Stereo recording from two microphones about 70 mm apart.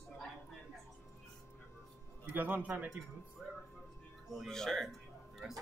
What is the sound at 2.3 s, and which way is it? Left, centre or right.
Speech, right.